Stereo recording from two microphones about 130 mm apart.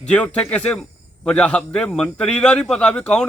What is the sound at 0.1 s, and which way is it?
Speech, 10° left (ahead or behind).